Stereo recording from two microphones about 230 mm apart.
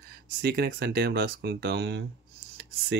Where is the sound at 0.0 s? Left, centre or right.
Right.